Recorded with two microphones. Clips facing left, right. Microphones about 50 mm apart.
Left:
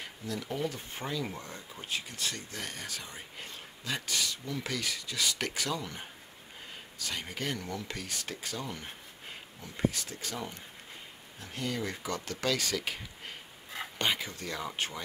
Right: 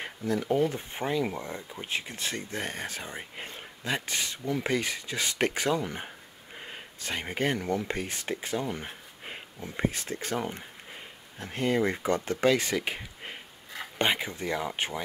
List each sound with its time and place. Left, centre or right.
0.4 s speech: right